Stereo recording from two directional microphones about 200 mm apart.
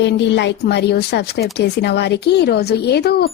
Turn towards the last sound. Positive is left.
turn(degrees=55)  # may be behind; listen again after turning